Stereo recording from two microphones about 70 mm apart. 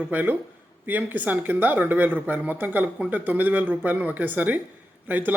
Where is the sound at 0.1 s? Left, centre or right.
Right.